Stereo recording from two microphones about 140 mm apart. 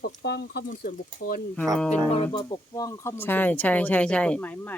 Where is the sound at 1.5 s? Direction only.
5° left (ahead or behind).